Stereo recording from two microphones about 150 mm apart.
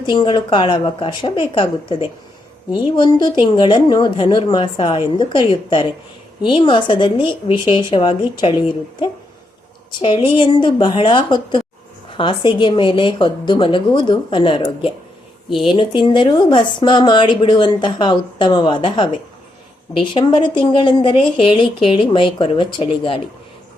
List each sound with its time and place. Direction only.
0.0 s a woman's voice: 30° left (ahead or behind)